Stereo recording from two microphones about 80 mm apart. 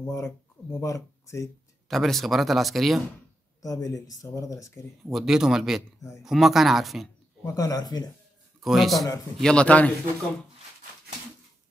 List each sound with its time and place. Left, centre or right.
0.0 s speech: left
1.9 s speech: centre
3.6 s speech: left
5.1 s speech: centre
5.9 s speech: left
6.2 s speech: centre
7.4 s speech: left
8.5 s a man's voice: centre
9.4 s a man's voice: centre